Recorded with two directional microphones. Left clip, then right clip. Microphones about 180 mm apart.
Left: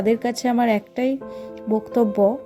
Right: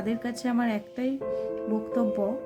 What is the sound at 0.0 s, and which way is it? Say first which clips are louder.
A woman's voice: left 11 dB; 30° left (ahead or behind).